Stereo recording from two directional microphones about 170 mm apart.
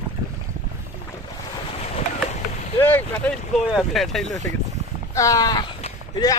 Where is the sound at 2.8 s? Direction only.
10° left (ahead or behind).